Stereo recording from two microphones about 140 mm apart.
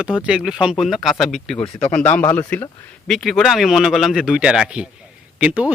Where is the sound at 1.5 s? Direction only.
40° left (ahead or behind).